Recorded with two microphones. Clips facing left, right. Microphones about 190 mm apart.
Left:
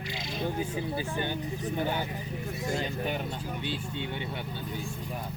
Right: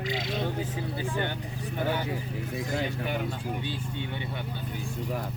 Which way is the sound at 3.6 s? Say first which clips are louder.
Even; 20° left (ahead or behind).